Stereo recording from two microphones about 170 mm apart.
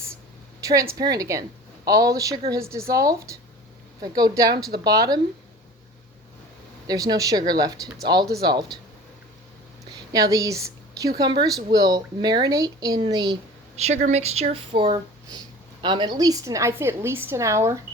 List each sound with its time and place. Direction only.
0.6 s a woman's voice: 20° right (ahead or behind)
6.8 s speech: 20° right (ahead or behind)
10.1 s a woman's voice: 20° right (ahead or behind)
13.7 s a woman's voice: 40° right (ahead or behind); by 17.7 s 15° right (ahead or behind)